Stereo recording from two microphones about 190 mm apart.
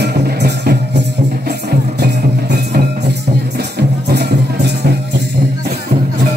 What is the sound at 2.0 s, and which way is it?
Music, 60° right (ahead or behind).